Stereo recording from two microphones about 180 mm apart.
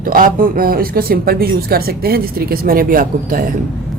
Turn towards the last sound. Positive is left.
turn(degrees=-50)  # may be behind; listen again after turning